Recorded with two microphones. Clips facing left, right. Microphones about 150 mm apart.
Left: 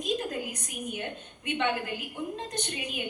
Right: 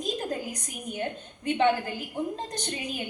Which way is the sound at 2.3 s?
35° right (ahead or behind).